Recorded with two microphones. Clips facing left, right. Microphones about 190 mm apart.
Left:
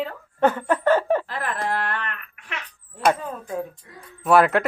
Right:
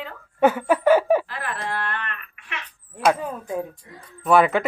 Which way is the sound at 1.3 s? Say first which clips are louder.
Left 3 dB; 45° left (ahead or behind).